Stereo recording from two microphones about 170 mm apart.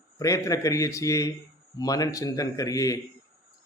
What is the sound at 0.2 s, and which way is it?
Speech, 20° left (ahead or behind).